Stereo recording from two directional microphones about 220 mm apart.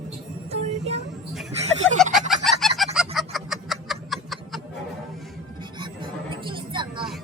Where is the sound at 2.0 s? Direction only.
Centre (ahead or behind).